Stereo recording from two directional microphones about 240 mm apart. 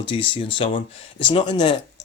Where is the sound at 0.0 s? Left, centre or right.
Left.